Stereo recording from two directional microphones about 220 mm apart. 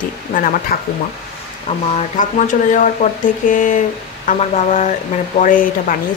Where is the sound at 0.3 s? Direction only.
35° left (ahead or behind).